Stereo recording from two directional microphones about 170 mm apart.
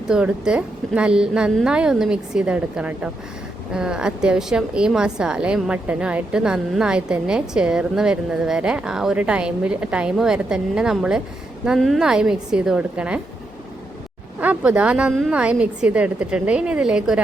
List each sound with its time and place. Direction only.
0.1 s a woman's voice: 5° right (ahead or behind)
14.3 s a woman's voice: 10° right (ahead or behind)